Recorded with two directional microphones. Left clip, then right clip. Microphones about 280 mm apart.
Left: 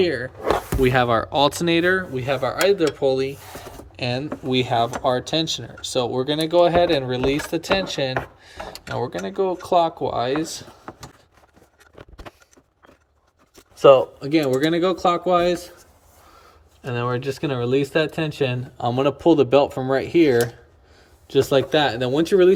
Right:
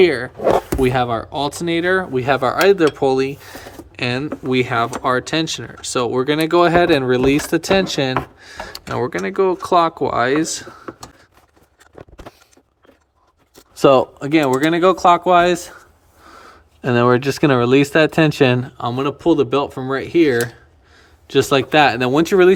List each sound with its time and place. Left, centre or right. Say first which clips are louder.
0.0 s speech: right 8 dB; centre
2.1 s speech: right 6 dB; centre
14.2 s speech: right 4 dB; centre
17.2 s speech: right 9 dB; centre
18.8 s speech: even; centre